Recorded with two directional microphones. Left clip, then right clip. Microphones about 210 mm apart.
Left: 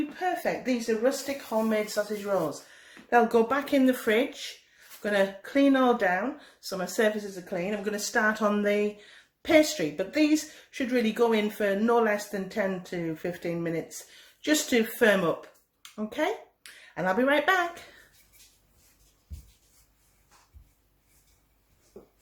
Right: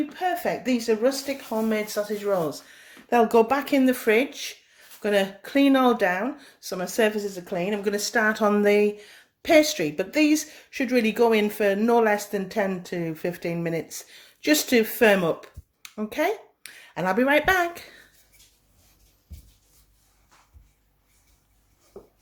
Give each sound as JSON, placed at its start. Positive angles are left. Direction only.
{"t": 0.2, "sound": "a woman's voice", "side_deg": -45}